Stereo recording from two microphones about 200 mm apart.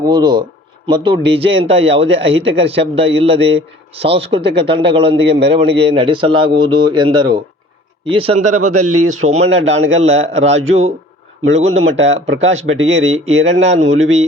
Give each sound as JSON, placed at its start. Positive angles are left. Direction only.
{"t": 0.0, "sound": "a man's voice", "side_deg": -20}
{"t": 9.6, "sound": "a man's voice", "side_deg": -70}
{"t": 10.0, "sound": "a man's voice", "side_deg": -30}
{"t": 12.2, "sound": "a man's voice", "side_deg": -70}
{"t": 13.4, "sound": "a man's voice", "side_deg": -35}